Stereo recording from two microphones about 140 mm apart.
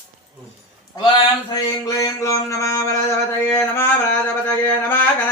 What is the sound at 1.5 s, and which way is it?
Speech, 25° left (ahead or behind).